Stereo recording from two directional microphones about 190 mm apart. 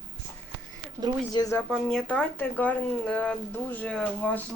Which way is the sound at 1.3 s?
20° left (ahead or behind).